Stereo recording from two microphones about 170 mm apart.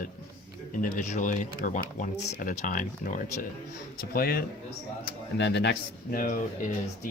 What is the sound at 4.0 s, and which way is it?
Speech, 60° left (ahead or behind).